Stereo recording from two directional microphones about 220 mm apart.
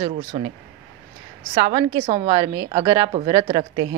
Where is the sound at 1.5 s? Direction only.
25° right (ahead or behind).